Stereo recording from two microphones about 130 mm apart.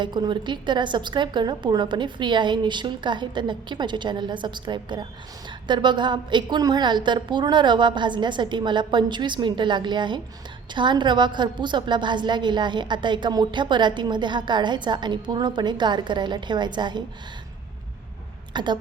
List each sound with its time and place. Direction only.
0.0 s a woman's voice: 35° right (ahead or behind)
18.5 s speech: 35° right (ahead or behind)